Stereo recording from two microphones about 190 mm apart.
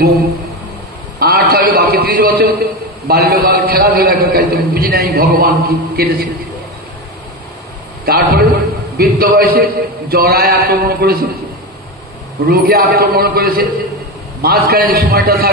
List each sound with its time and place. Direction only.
1.2 s a man's voice: 55° right (ahead or behind)
8.0 s a man's voice: 55° right (ahead or behind)
12.4 s a man's voice: 55° right (ahead or behind)